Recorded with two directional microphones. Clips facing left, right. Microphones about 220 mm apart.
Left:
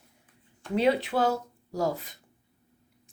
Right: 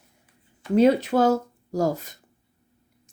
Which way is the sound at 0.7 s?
45° right (ahead or behind).